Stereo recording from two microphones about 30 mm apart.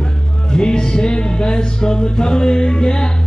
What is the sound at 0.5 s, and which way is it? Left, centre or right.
Music, left.